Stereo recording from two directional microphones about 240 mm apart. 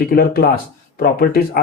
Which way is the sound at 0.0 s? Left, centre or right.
Left.